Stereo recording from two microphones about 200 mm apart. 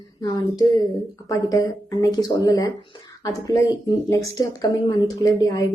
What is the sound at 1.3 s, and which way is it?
Speech, 15° left (ahead or behind).